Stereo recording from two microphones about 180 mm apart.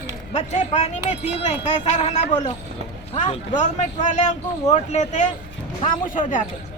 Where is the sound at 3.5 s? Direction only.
40° left (ahead or behind).